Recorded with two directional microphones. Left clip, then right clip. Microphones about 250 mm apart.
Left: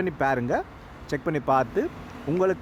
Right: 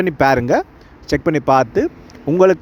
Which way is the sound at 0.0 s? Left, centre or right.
Right.